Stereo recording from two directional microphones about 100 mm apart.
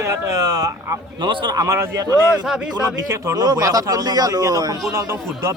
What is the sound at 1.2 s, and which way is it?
Speech, 50° right (ahead or behind).